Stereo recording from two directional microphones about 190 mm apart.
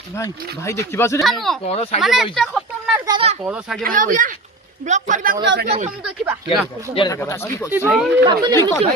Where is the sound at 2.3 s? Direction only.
Centre (ahead or behind).